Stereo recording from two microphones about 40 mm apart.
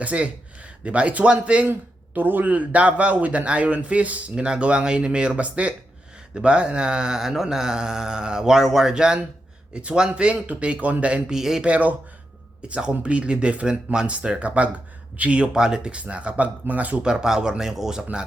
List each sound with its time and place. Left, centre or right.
0.0 s a man's voice: right
2.1 s speech: right
4.4 s speech: right
7.2 s speech: centre; by 10.3 s right
10.4 s speech: right
11.3 s speech: centre
11.6 s speech: right
15.5 s speech: centre
16.0 s speech: right
17.0 s speech: centre